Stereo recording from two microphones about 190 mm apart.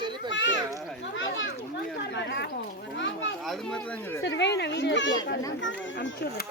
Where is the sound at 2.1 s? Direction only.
65° left (ahead or behind).